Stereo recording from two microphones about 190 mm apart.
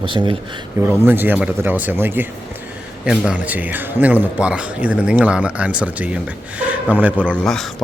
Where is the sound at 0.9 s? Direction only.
10° right (ahead or behind).